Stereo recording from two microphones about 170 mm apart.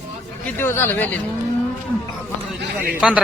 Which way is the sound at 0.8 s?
10° left (ahead or behind).